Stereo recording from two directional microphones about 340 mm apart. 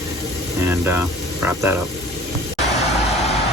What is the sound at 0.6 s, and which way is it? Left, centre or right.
Speech, centre.